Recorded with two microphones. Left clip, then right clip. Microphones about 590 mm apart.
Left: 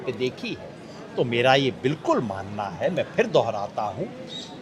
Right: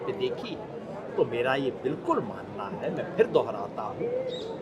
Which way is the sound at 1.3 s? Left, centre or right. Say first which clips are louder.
Left 7 dB; left.